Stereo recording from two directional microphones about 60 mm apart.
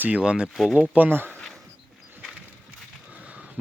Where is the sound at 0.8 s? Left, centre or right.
Right.